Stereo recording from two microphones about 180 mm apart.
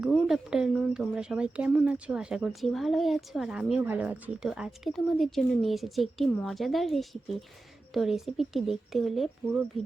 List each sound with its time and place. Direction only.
0.0 s speech: 5° right (ahead or behind)